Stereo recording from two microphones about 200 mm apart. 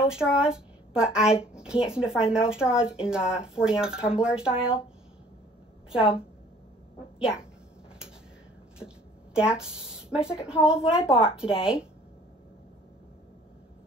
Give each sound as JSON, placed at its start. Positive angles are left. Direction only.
{"t": 0.0, "sound": "a woman's voice", "side_deg": -5}
{"t": 5.9, "sound": "a woman's voice", "side_deg": 25}
{"t": 7.2, "sound": "a woman's voice", "side_deg": -5}
{"t": 8.7, "sound": "speech", "side_deg": -5}